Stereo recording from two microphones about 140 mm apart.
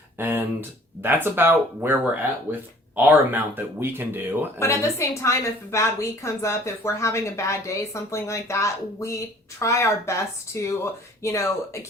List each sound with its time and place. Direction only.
0.2 s speech: 15° right (ahead or behind)
4.6 s a woman's voice: 20° left (ahead or behind)